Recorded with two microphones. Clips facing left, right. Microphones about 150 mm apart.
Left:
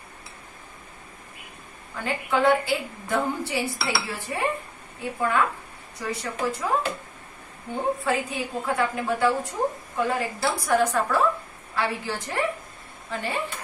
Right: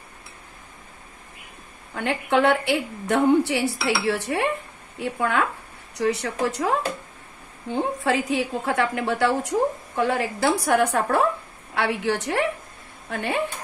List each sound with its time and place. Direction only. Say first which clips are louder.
2.0 s a woman's voice: right 4 dB; 70° right (ahead or behind)
3.8 s dishes: right 6 dB; 80° right
5.2 s a woman's voice: even; 75° right (ahead or behind)
7.7 s a woman's voice: right 2 dB; 90° right; by 12.4 s 75° right (ahead or behind)
13.1 s speech: right 3 dB; 60° right (ahead or behind)